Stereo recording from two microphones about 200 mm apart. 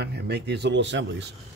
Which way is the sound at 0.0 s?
55° right (ahead or behind).